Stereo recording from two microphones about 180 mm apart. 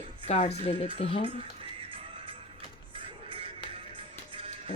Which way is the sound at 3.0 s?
30° right (ahead or behind).